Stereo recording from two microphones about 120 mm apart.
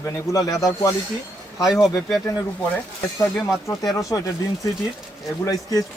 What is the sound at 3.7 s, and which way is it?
Speech, 25° left (ahead or behind).